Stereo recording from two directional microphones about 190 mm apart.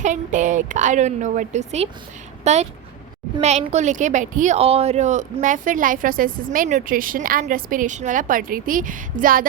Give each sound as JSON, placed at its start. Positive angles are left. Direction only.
{"t": 0.0, "sound": "a woman's voice", "side_deg": -40}